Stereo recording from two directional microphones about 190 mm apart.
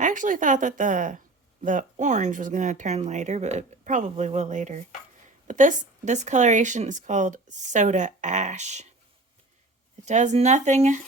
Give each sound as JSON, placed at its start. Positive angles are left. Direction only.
{"t": 0.0, "sound": "a woman's voice", "side_deg": -40}
{"t": 10.1, "sound": "speech", "side_deg": -40}